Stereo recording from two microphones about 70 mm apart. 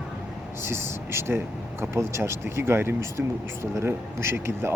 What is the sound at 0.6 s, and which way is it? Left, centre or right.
Speech, right.